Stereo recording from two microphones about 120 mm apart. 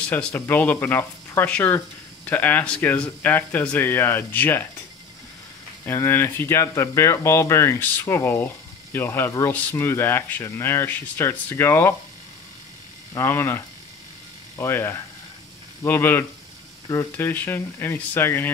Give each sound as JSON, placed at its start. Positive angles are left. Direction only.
{"t": 0.0, "sound": "speech", "side_deg": 10}
{"t": 5.9, "sound": "speech", "side_deg": 20}
{"t": 13.1, "sound": "speech", "side_deg": 20}
{"t": 14.6, "sound": "speech", "side_deg": 20}